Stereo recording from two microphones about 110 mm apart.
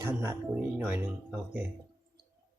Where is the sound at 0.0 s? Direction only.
20° right (ahead or behind).